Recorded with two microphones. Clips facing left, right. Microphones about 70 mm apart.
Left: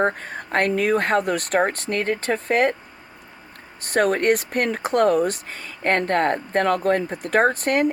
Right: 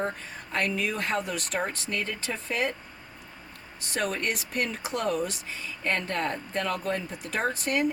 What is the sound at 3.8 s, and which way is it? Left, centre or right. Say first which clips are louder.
Speech: left 10 dB; left.